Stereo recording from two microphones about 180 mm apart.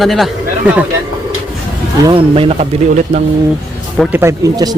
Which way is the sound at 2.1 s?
30° right (ahead or behind).